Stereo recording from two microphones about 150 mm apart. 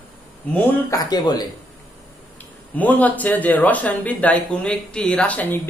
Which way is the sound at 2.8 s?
10° left (ahead or behind).